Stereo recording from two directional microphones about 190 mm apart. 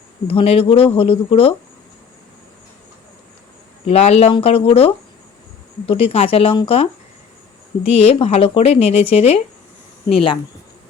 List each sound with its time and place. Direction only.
0.3 s speech: 30° left (ahead or behind)
3.8 s speech: 35° left (ahead or behind)
7.9 s speech: 30° left (ahead or behind)